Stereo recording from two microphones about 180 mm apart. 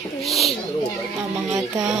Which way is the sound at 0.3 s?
Centre (ahead or behind).